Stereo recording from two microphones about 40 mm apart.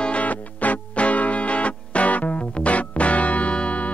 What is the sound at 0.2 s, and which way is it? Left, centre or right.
Music, left.